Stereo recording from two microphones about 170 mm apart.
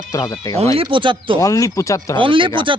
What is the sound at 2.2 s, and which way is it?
Speech, 30° right (ahead or behind).